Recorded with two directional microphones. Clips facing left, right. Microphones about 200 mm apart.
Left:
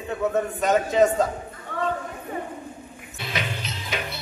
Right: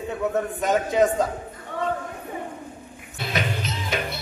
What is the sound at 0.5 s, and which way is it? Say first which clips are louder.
Speech: left 1 dB; 15° right (ahead or behind).